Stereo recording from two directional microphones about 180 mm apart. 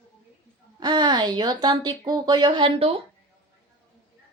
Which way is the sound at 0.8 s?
25° right (ahead or behind).